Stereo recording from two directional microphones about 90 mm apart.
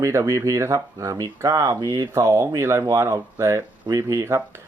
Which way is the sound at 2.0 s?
30° right (ahead or behind).